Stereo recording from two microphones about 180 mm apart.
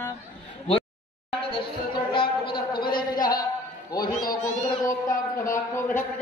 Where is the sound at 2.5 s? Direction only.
25° left (ahead or behind).